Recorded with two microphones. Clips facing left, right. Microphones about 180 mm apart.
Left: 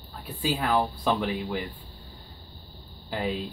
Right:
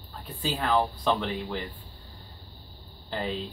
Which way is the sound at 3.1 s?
5° left (ahead or behind).